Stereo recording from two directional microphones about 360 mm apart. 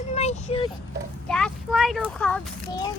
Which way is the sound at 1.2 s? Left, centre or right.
Centre.